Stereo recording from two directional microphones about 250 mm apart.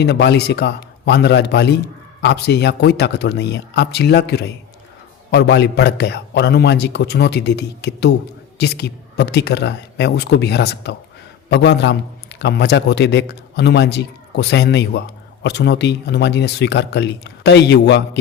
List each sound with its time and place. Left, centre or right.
0.0 s a man's voice: left